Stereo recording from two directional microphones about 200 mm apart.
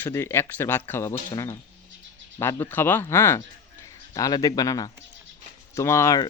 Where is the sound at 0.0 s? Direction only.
10° left (ahead or behind).